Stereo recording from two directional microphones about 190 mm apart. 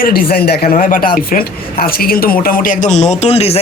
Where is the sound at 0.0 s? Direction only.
50° left (ahead or behind).